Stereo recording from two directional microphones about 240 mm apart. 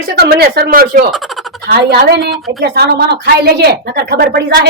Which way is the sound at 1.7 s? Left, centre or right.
Right.